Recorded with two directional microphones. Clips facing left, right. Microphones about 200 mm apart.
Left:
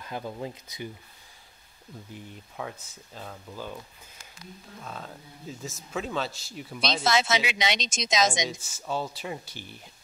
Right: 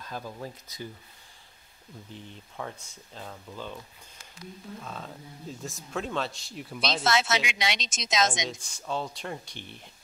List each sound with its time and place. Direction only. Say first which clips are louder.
0.0 s speech: left 3 dB; 15° left (ahead or behind)
2.1 s speech: left 1 dB; 5° left (ahead or behind)
4.8 s speech: even; centre (ahead or behind)